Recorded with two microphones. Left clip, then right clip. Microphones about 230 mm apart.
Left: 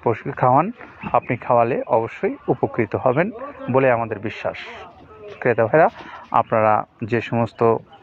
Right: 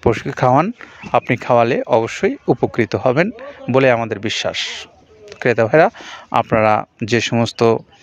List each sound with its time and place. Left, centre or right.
0.0 s speech: right